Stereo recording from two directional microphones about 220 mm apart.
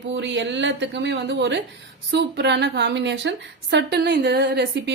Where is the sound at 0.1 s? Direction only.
55° right (ahead or behind).